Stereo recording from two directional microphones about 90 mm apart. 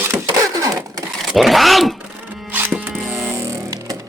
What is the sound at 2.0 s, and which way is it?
Music, 15° right (ahead or behind).